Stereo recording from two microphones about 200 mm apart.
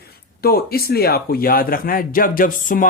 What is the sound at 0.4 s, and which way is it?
Speech, 50° left (ahead or behind).